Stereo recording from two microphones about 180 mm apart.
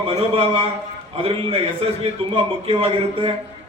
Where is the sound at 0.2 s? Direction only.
35° right (ahead or behind).